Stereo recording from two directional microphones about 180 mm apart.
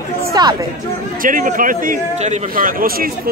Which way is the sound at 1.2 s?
50° right (ahead or behind).